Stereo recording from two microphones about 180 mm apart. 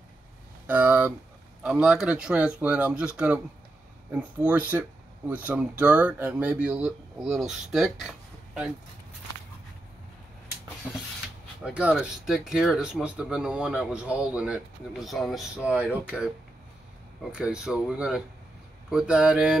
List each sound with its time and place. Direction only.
0.7 s a sound: 10° right (ahead or behind)
1.6 s speech: 5° right (ahead or behind)
11.6 s speech: 5° right (ahead or behind)